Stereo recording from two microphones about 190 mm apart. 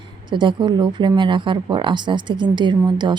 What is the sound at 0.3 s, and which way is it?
Speech, 25° right (ahead or behind).